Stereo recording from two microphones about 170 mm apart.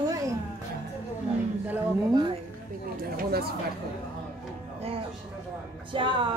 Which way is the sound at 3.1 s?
65° right (ahead or behind).